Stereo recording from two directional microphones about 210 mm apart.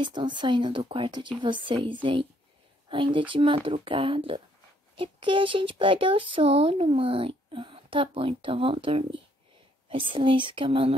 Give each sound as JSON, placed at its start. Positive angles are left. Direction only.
{"t": 0.0, "sound": "speech", "side_deg": -20}